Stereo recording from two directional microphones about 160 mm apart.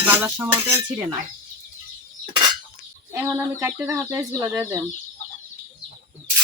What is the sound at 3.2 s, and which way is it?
Speech, 15° right (ahead or behind).